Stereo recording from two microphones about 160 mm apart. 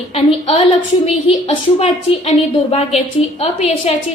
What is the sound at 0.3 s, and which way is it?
A woman's voice, 35° left (ahead or behind).